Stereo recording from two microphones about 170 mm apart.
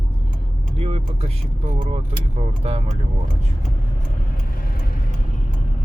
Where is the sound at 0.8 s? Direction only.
35° right (ahead or behind).